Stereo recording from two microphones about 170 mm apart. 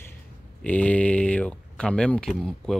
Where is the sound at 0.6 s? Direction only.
10° left (ahead or behind).